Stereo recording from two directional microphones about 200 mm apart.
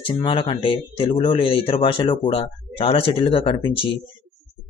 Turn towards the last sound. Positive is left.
turn(degrees=25)  # may be behind; listen again after turning